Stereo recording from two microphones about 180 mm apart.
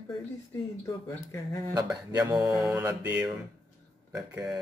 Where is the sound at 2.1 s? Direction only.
20° right (ahead or behind).